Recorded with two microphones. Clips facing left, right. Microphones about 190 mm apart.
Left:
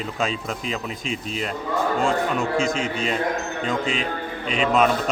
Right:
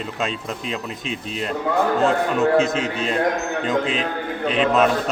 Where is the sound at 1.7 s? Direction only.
75° right (ahead or behind).